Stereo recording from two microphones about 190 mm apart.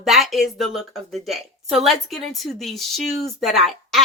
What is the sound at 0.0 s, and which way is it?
A woman's voice, centre (ahead or behind).